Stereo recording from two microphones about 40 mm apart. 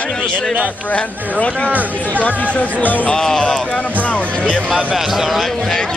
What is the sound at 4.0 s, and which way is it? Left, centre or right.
Speech, left.